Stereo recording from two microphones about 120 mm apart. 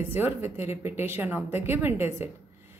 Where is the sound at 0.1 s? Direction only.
15° right (ahead or behind).